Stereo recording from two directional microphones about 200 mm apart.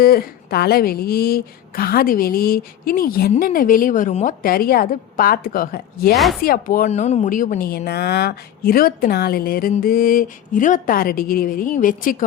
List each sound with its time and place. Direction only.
0.0 s a woman's voice: 50° left (ahead or behind)
6.1 s speech: centre (ahead or behind)
6.4 s a woman's voice: 45° left (ahead or behind)